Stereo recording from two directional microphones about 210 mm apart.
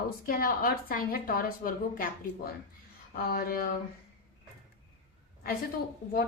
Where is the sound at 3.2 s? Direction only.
45° left (ahead or behind).